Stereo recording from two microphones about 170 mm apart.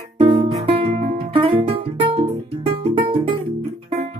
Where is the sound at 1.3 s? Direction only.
35° right (ahead or behind).